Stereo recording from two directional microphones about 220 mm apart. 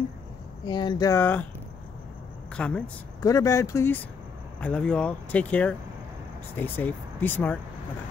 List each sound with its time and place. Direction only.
0.7 s speech: 20° left (ahead or behind)
2.5 s speech: 5° left (ahead or behind)
3.3 s speech: 15° left (ahead or behind)